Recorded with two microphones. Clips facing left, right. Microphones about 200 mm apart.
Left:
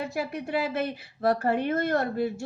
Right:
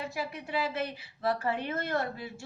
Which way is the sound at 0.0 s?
50° left (ahead or behind).